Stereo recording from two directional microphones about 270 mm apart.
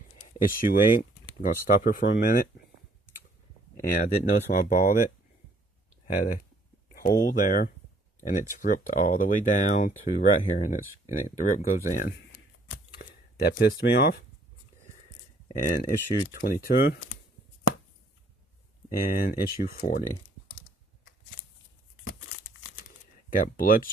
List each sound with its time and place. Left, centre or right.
0.4 s speech: left
3.8 s speech: left
6.9 s a sound: left
7.2 s speech: left
15.4 s speech: centre
16.3 s speech: left
18.9 s speech: left
22.0 s crumpling: left
23.3 s speech: left